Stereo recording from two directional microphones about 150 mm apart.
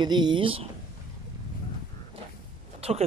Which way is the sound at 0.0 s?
30° right (ahead or behind).